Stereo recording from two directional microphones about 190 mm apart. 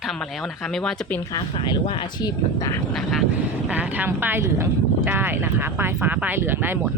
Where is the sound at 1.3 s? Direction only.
25° left (ahead or behind).